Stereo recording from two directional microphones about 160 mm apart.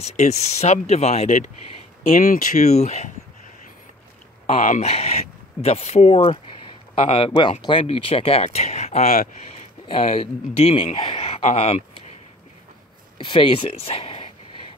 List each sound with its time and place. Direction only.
0.0 s speech: 45° left (ahead or behind)
4.6 s speech: 50° left (ahead or behind)
9.0 s speech: 65° left (ahead or behind)
9.5 s speech: 40° left (ahead or behind)
13.2 s speech: 35° left (ahead or behind)